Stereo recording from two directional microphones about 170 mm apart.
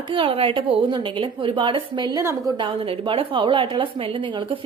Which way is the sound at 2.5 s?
30° right (ahead or behind).